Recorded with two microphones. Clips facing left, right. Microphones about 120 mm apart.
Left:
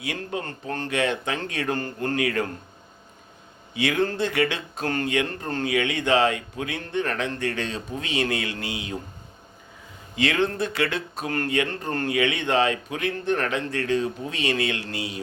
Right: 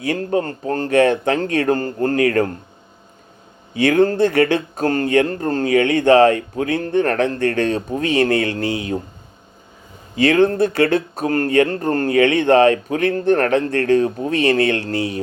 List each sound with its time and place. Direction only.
0.0 s speech: 45° right (ahead or behind)
3.8 s speech: 50° right (ahead or behind)
10.2 s speech: 45° right (ahead or behind)